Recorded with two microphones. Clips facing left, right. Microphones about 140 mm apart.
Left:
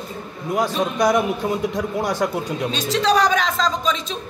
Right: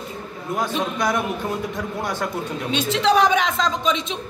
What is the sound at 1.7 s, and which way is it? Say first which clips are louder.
Speech: left 4 dB; 15° left (ahead or behind).